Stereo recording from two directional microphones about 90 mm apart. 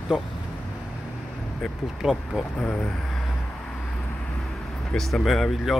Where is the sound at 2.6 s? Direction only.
10° left (ahead or behind).